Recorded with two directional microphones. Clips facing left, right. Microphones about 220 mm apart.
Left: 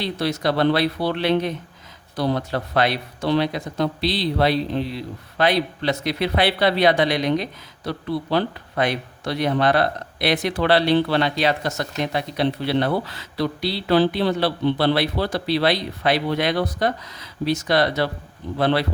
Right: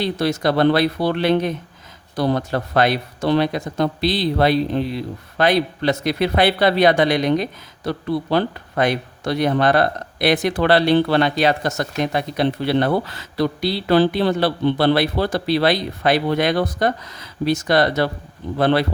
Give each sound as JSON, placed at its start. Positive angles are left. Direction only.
{"t": 0.0, "sound": "speech", "side_deg": -50}